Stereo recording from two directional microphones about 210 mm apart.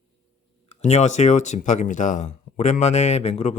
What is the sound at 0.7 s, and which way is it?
Speech, 35° left (ahead or behind).